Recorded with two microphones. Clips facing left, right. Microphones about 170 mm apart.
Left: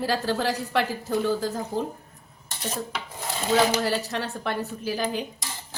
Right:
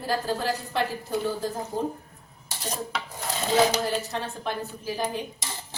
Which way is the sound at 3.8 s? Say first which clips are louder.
Left 2 dB; 70° left (ahead or behind).